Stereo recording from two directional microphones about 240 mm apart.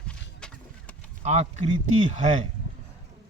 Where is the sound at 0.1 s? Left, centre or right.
Centre.